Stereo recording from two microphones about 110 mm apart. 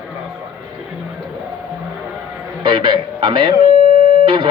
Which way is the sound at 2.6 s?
50° right (ahead or behind).